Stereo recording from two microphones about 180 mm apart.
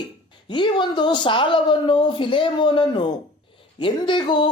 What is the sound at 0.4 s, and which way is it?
A woman's voice, 25° left (ahead or behind).